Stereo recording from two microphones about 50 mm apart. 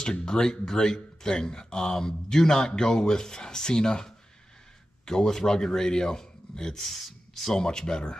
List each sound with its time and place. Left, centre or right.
0.0 s speech: centre